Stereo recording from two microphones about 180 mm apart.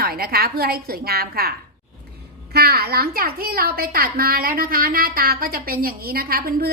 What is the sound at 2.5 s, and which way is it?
A woman's voice, 60° right (ahead or behind).